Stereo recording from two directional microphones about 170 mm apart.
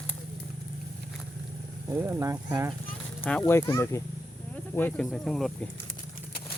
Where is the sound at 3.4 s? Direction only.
15° left (ahead or behind).